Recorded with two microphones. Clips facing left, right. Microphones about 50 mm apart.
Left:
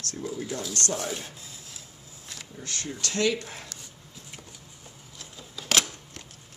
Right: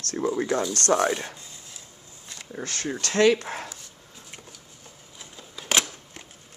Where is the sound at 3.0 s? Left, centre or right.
Right.